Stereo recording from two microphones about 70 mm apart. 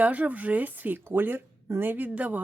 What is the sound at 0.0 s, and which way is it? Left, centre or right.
Speech, right.